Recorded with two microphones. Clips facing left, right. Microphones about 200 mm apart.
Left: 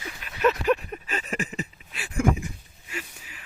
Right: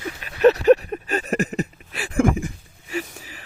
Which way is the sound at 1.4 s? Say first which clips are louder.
Right 8 dB; 70° right (ahead or behind).